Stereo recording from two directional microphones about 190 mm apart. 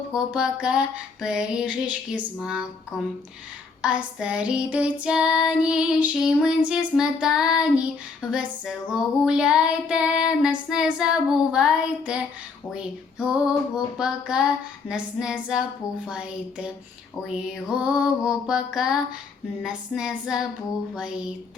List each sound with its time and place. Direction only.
0.1 s child singing: 5° right (ahead or behind)
3.8 s child singing: 5° right (ahead or behind)